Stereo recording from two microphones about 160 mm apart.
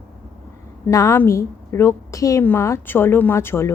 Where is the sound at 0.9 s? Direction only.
20° left (ahead or behind).